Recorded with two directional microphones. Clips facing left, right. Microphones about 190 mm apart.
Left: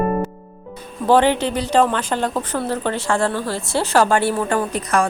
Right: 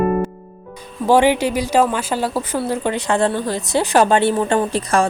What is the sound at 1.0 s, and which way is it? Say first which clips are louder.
Speech: right 1 dB; 10° right (ahead or behind).